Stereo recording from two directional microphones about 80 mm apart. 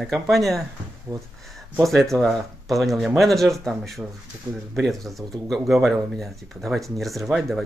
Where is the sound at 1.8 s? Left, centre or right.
Centre.